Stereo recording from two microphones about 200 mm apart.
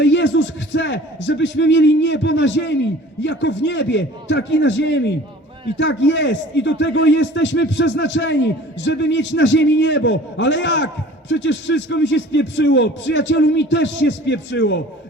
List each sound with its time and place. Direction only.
0.0 s a man's voice: 60° left (ahead or behind)